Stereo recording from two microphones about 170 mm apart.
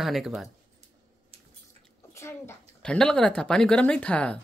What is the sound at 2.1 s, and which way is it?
Bathtub, 15° left (ahead or behind).